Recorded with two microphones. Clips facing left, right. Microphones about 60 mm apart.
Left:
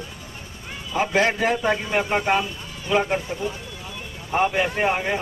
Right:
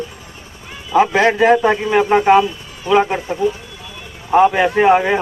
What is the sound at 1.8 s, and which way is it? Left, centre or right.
Speech, right.